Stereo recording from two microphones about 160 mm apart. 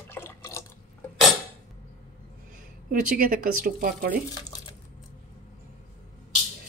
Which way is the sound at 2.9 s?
60° right (ahead or behind).